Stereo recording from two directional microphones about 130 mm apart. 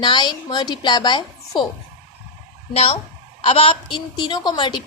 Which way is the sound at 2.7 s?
50° left (ahead or behind).